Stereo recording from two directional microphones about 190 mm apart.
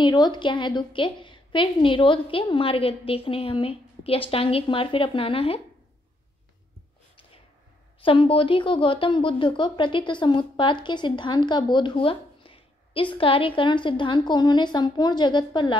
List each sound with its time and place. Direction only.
0.0 s speech: 25° left (ahead or behind)
8.0 s speech: 30° left (ahead or behind)